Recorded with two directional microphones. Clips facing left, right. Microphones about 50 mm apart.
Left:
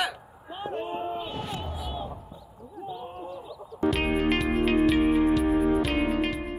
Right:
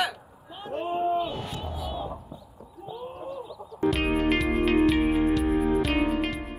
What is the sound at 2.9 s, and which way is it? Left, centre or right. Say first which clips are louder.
Music: right 2 dB; centre.